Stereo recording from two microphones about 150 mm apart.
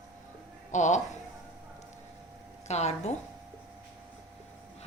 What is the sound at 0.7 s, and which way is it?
Speech, 55° left (ahead or behind).